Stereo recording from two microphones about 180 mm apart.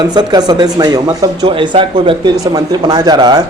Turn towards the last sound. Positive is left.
turn(degrees=-25)  # may be behind; listen again after turning